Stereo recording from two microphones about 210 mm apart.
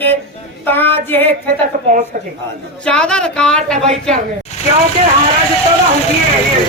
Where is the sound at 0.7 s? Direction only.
10° left (ahead or behind).